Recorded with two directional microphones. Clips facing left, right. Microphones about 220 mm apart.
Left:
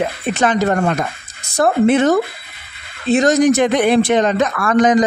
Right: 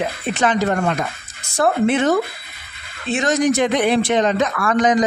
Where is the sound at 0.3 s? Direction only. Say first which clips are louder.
Left 2 dB; 45° left (ahead or behind).